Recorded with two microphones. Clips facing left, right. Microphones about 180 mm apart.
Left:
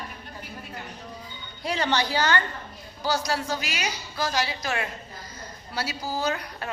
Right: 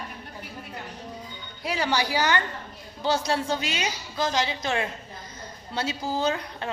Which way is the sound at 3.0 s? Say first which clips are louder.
Right 2 dB; 25° right (ahead or behind).